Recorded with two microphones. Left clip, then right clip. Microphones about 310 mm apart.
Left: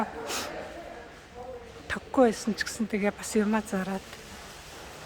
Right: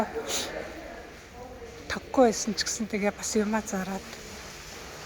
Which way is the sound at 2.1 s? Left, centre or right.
Centre.